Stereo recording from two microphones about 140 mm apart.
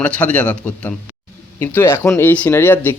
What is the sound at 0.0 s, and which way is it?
A man's voice, 10° left (ahead or behind).